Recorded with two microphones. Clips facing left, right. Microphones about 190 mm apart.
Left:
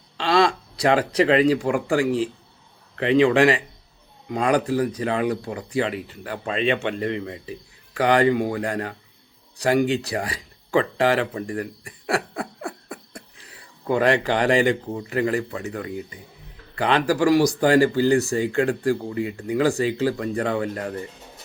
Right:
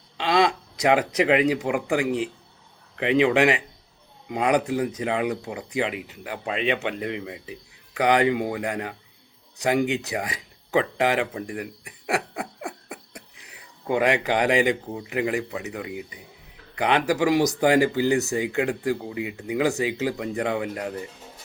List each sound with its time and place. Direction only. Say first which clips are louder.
0.2 s speech: left 2 dB; 15° right (ahead or behind)
5.4 s speech: left 2 dB; 10° right (ahead or behind)
11.9 s a sound: even; 15° right (ahead or behind)
16.7 s speech: left 1 dB; 15° right (ahead or behind)